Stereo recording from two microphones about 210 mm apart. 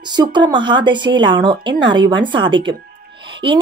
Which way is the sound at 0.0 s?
20° right (ahead or behind).